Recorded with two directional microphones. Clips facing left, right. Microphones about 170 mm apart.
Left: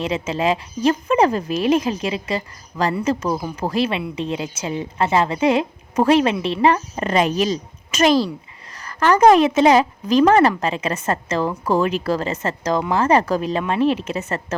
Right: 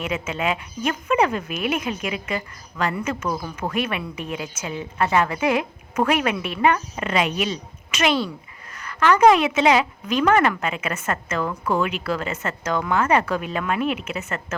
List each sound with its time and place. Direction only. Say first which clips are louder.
0.0 s a woman's voice: left 4 dB; 30° left (ahead or behind)